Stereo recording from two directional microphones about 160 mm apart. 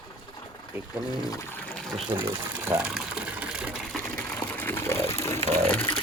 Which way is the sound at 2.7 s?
10° right (ahead or behind).